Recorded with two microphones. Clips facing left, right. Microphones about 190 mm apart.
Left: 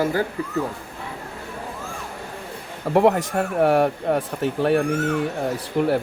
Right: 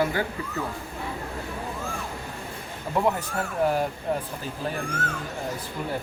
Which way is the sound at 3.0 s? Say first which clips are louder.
Left 8 dB; 70° left (ahead or behind).